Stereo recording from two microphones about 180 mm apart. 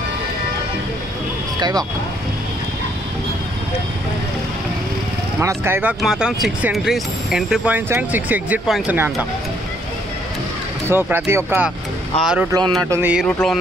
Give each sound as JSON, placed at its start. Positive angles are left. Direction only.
{"t": 1.6, "sound": "speech", "side_deg": -20}
{"t": 5.4, "sound": "speech", "side_deg": -15}
{"t": 10.9, "sound": "speech", "side_deg": -10}
{"t": 12.2, "sound": "a sound", "side_deg": -5}
{"t": 12.4, "sound": "speech", "side_deg": -20}
{"t": 12.9, "sound": "a sound", "side_deg": -10}